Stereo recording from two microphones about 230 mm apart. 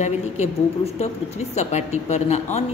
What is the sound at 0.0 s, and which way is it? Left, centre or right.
A woman's voice, left.